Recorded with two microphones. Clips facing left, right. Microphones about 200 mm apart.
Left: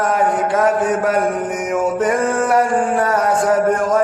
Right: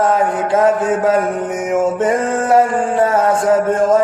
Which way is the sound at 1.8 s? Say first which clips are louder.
Even; 25° right (ahead or behind).